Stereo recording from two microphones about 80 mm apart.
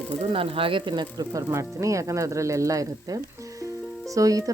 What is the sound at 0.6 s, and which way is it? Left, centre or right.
Speech, right.